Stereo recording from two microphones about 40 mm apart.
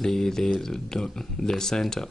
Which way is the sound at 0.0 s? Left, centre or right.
Centre.